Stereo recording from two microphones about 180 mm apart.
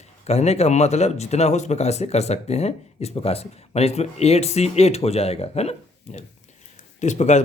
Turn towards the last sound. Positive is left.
turn(degrees=40)  # may be behind; listen again after turning